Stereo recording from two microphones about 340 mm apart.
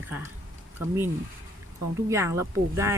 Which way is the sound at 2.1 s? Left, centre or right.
Centre.